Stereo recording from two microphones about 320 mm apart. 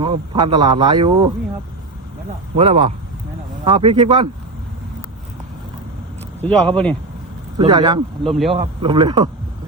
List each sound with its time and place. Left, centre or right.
0.0 s speech: centre
2.6 s speech: centre
6.4 s speech: centre
7.6 s speech: centre
8.2 s speech: centre
8.5 s speech: centre